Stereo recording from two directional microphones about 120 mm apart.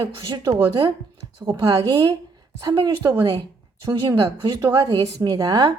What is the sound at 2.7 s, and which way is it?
Speech, 35° right (ahead or behind).